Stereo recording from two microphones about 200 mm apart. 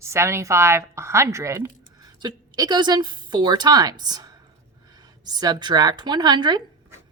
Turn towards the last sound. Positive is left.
turn(degrees=-20)  # may be behind; listen again after turning